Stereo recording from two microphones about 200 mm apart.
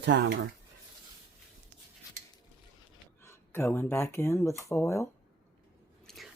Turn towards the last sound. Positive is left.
turn(degrees=5)  # may be behind; listen again after turning